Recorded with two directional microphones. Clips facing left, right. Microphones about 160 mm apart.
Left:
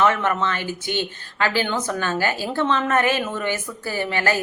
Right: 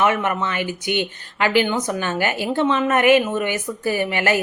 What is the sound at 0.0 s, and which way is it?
A woman's voice, 15° right (ahead or behind).